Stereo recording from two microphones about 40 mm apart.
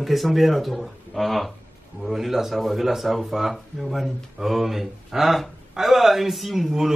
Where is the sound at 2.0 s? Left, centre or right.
Centre.